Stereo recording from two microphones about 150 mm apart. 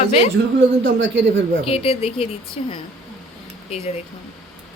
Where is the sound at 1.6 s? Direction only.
40° left (ahead or behind).